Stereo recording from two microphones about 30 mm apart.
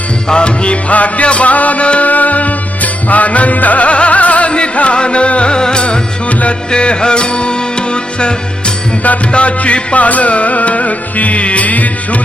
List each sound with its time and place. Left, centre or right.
0.3 s music: left
0.9 s music: left
5.5 s music: left